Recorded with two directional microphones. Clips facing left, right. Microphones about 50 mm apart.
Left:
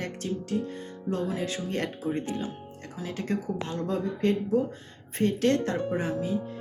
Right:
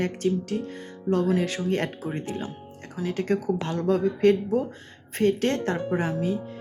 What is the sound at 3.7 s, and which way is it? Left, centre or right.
Speech, right.